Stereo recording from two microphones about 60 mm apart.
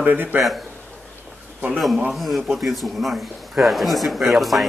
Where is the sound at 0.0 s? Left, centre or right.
Right.